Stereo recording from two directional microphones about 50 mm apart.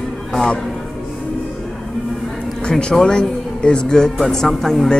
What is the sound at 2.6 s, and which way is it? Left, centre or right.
Speech, centre.